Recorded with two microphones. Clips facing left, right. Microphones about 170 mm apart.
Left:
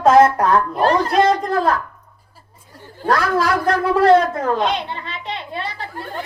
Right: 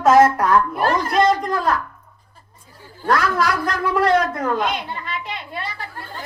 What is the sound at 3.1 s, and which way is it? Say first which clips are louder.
Speech: left 2 dB; 30° left (ahead or behind).